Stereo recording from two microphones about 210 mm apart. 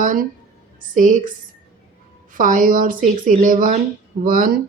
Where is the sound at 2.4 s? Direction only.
40° right (ahead or behind).